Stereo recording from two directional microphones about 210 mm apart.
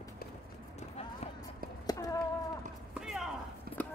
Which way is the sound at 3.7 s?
45° right (ahead or behind).